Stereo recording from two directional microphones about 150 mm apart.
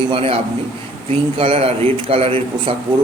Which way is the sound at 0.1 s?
40° right (ahead or behind).